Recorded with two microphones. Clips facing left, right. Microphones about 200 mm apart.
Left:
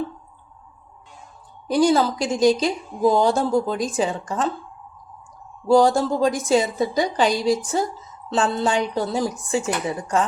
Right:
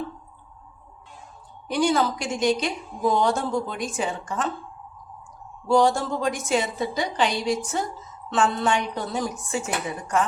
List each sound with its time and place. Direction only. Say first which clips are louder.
1.6 s a woman's voice: left 4 dB; 35° left (ahead or behind)
5.6 s a woman's voice: left 4 dB; 35° left (ahead or behind)